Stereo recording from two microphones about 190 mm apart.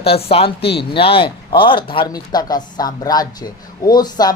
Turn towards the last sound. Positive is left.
turn(degrees=20)  # may be behind; listen again after turning